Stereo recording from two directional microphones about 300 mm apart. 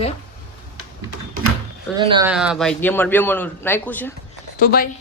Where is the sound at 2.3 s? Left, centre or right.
Centre.